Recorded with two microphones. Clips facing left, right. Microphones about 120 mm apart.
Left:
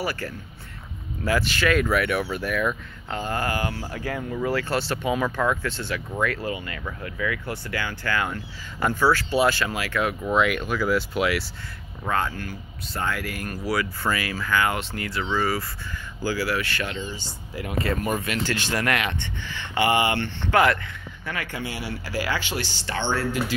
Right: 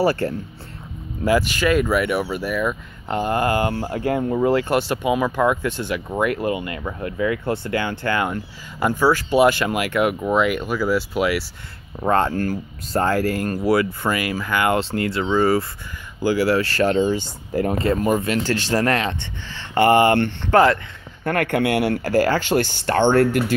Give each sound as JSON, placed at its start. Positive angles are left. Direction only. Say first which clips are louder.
{"t": 0.0, "sound": "speech", "louder": "right 10 dB", "side_deg": -30}
{"t": 1.2, "sound": "speech", "louder": "right 5 dB", "side_deg": -10}
{"t": 3.1, "sound": "speech", "louder": "right 7 dB", "side_deg": -20}
{"t": 8.7, "sound": "speech", "louder": "right 3 dB", "side_deg": -10}
{"t": 10.3, "sound": "speech", "louder": "right 3 dB", "side_deg": -5}
{"t": 12.0, "sound": "speech", "louder": "right 8 dB", "side_deg": -35}
{"t": 17.7, "sound": "speech", "louder": "right 3 dB", "side_deg": -30}
{"t": 19.7, "sound": "speech", "louder": "right 7 dB", "side_deg": -45}